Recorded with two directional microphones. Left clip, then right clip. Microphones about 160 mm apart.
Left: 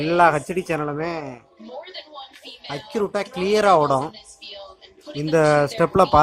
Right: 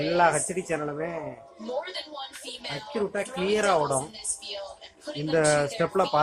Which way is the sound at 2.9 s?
45° left (ahead or behind).